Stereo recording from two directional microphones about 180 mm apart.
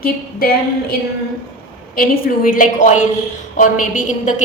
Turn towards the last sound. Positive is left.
turn(degrees=45)  # may be behind; listen again after turning